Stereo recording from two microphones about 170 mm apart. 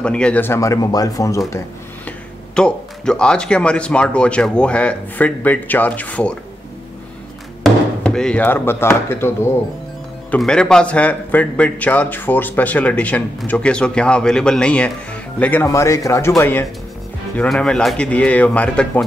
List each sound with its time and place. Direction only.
0.0 s a man's voice: 5° left (ahead or behind)
2.0 s a man's voice: 5° left (ahead or behind)
7.6 s a man's voice: 5° left (ahead or behind)